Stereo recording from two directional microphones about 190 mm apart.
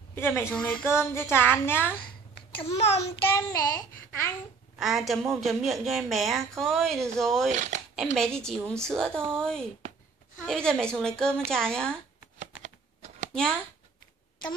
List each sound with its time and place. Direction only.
0.1 s child singing: 10° left (ahead or behind)
2.6 s a child's voice: 30° left (ahead or behind)
3.3 s child singing: 15° left (ahead or behind)
4.7 s a woman's voice: centre (ahead or behind)
12.6 s typing: 40° right (ahead or behind)
13.3 s speech: 5° left (ahead or behind)